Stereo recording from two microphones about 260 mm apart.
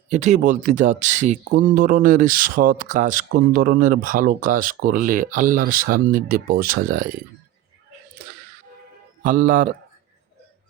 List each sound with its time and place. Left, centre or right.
0.1 s speech: right
9.2 s speech: right